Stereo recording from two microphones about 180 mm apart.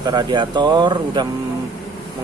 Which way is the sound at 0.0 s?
25° right (ahead or behind).